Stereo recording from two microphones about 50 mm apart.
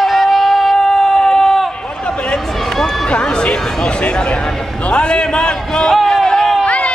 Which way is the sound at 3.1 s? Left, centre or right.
Centre.